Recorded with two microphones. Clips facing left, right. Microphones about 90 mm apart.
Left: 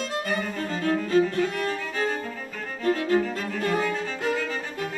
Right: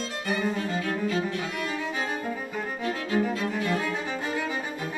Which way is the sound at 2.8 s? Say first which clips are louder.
Left 10 dB; 45° left (ahead or behind).